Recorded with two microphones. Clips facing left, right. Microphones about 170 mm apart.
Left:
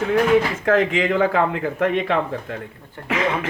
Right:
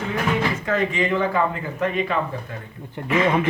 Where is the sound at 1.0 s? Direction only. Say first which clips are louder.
Left 3 dB; 70° left (ahead or behind).